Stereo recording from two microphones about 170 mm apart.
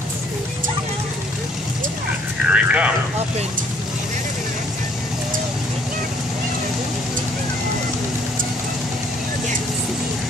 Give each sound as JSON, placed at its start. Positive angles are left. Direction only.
{"t": 2.4, "sound": "vehicle", "side_deg": -5}